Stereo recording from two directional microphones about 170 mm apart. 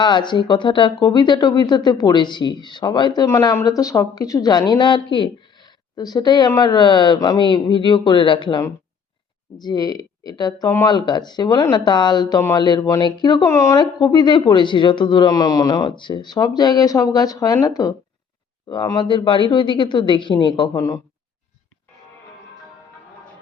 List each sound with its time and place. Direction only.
0.0 s speech: 25° left (ahead or behind)